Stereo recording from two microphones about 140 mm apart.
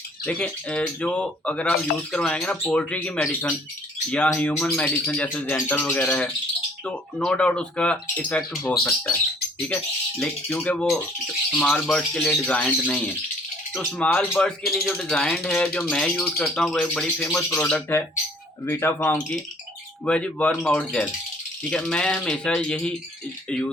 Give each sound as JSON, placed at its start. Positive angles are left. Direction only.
{"t": 0.3, "sound": "speech", "side_deg": 5}